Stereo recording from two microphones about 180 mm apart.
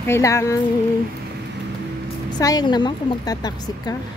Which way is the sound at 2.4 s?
20° left (ahead or behind).